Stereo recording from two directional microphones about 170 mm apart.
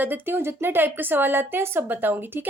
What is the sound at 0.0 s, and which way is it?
A woman's voice, 10° right (ahead or behind).